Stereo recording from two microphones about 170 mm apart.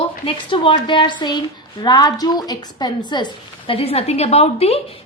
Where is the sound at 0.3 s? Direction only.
30° left (ahead or behind).